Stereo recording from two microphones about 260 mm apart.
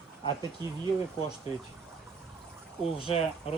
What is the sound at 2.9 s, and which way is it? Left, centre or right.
Speech, left.